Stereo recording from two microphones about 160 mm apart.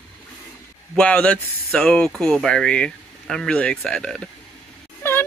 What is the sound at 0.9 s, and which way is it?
Speech, 5° left (ahead or behind).